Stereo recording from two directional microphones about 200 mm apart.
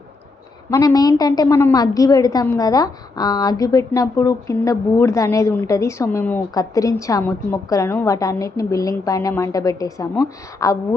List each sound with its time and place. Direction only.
0.7 s a woman's voice: 15° left (ahead or behind)